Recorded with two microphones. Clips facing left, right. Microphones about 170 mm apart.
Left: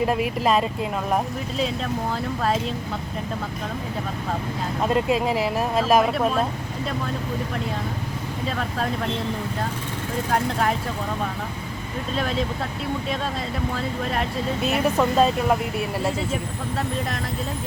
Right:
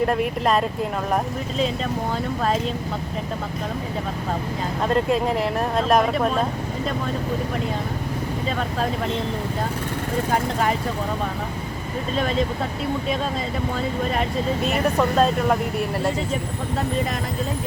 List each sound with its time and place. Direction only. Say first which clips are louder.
0.0 s speech: right 1 dB; 5° left (ahead or behind)
4.9 s speech: right 1 dB; 5° left (ahead or behind)
10.3 s speech: left 1 dB; centre (ahead or behind)
12.1 s speech: right 3 dB; centre (ahead or behind)
13.7 s speech: right 4 dB; centre (ahead or behind)